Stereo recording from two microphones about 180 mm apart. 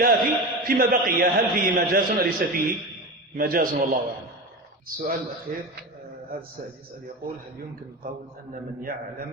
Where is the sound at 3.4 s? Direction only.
55° right (ahead or behind).